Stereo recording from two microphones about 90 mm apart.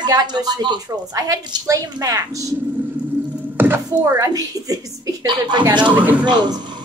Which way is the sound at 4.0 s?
45° right (ahead or behind).